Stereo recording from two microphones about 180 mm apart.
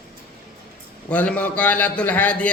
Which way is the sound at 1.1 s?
10° left (ahead or behind).